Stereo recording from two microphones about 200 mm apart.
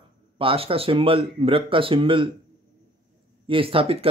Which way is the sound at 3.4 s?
25° right (ahead or behind).